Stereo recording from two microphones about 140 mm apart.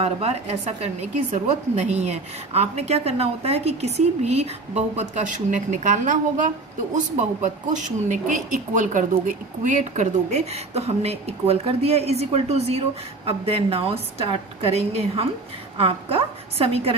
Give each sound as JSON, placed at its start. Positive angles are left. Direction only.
{"t": 0.0, "sound": "speech", "side_deg": -45}